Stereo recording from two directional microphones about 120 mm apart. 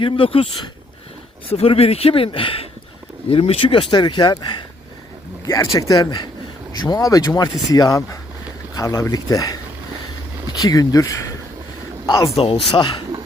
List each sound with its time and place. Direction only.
0.0 s speech: 50° left (ahead or behind); by 9.6 s 30° left (ahead or behind)
10.6 s a man's voice: 30° left (ahead or behind)
12.4 s speech: 50° left (ahead or behind)